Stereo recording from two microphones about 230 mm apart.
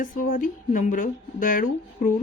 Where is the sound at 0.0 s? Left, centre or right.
Left.